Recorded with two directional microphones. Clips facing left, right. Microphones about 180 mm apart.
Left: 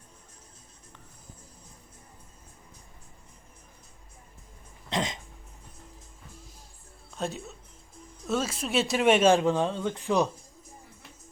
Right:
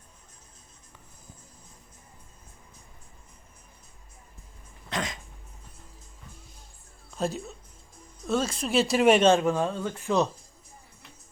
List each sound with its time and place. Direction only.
4.9 s cough: 25° left (ahead or behind)
7.2 s speech: centre (ahead or behind)
9.3 s speech: 15° left (ahead or behind)